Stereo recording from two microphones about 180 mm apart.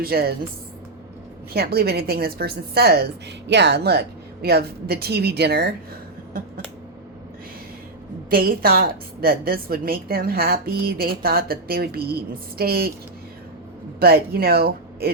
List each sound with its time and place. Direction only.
0.0 s a woman's voice: 55° right (ahead or behind)
1.5 s a woman's voice: 60° right (ahead or behind)
8.3 s a woman's voice: 55° right (ahead or behind)
14.0 s speech: 60° right (ahead or behind)